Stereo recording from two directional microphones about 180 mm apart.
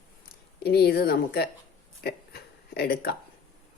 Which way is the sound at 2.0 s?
60° left (ahead or behind).